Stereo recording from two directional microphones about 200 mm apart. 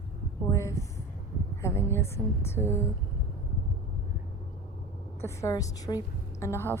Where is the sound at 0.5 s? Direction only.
15° left (ahead or behind).